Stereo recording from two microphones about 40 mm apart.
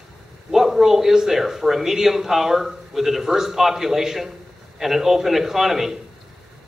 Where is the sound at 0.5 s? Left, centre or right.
Centre.